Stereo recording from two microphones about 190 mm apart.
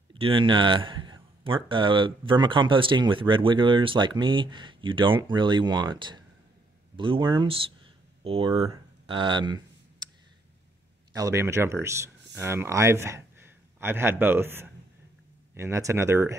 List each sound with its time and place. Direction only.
0.1 s speech: 25° right (ahead or behind)
8.6 s a sound: 25° right (ahead or behind)
11.1 s speech: 15° right (ahead or behind)